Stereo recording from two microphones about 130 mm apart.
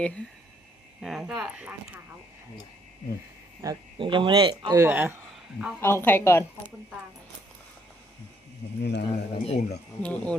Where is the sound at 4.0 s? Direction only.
40° right (ahead or behind).